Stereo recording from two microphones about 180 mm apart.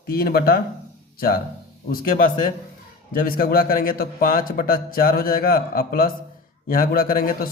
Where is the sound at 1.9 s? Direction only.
50° left (ahead or behind).